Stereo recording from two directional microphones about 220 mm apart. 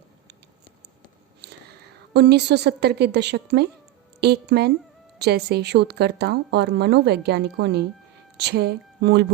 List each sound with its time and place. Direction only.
1.4 s a woman's voice: 50° right (ahead or behind)